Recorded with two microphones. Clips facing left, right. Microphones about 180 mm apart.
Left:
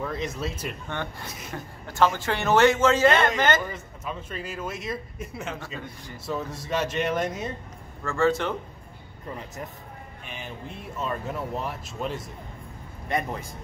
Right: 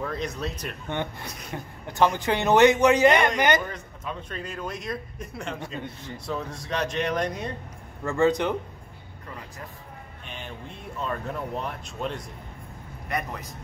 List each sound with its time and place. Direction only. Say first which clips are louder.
0.0 s a man's voice: even; centre (ahead or behind)
1.5 s a man's voice: right 1 dB; 20° right (ahead or behind)
3.6 s a man's voice: even; 5° left (ahead or behind)
8.0 s a man's voice: right 2 dB; 20° right (ahead or behind)
11.0 s a man's voice: even; 5° left (ahead or behind)
13.1 s a man's voice: left 3 dB; 25° left (ahead or behind)